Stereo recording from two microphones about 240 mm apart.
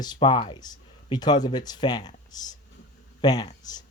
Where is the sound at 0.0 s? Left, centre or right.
Centre.